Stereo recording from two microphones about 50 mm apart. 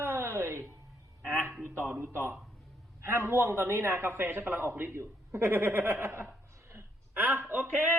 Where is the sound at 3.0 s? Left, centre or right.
Right.